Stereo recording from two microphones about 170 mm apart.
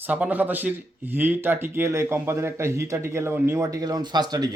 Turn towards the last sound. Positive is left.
turn(degrees=-25)  # may be behind; listen again after turning